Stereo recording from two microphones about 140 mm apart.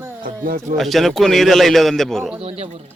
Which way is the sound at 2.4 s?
45° right (ahead or behind).